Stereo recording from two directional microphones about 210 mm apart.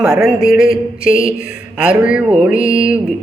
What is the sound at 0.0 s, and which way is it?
Speech, centre (ahead or behind).